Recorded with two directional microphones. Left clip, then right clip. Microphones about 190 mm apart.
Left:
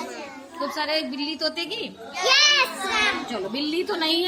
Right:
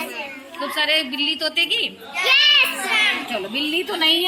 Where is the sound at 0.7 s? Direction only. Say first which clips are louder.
Right 8 dB; 5° left (ahead or behind).